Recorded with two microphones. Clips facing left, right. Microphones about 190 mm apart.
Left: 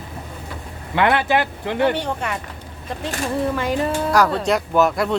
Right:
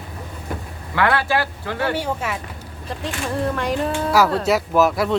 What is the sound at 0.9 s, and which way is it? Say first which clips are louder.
Speech: left 2 dB; 20° left (ahead or behind).